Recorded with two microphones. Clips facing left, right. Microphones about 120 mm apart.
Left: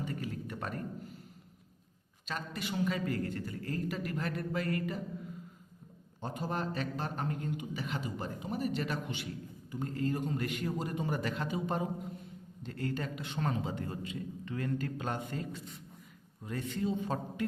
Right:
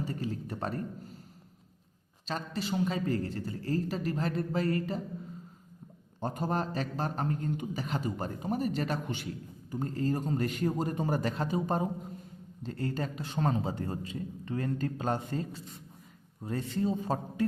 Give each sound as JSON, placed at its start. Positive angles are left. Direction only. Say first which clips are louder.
{"t": 0.0, "sound": "a sound", "louder": "right 3 dB", "side_deg": -30}
{"t": 2.2, "sound": "a man's voice", "louder": "right 4 dB", "side_deg": -30}
{"t": 6.1, "sound": "a man's voice", "louder": "right 4 dB", "side_deg": -45}